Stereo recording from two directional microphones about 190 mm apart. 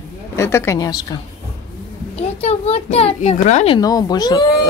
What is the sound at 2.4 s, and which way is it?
A child's voice, 35° left (ahead or behind).